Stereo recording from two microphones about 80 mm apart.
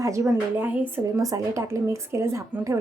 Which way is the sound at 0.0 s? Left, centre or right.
Right.